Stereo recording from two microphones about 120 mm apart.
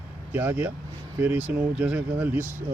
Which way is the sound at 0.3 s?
15° right (ahead or behind).